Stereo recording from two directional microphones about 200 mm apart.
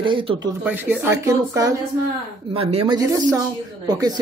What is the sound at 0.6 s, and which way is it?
Speech, 10° right (ahead or behind).